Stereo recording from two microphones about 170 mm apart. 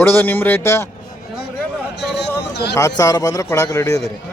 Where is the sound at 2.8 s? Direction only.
20° left (ahead or behind).